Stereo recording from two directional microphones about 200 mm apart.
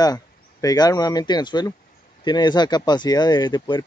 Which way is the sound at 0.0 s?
20° left (ahead or behind).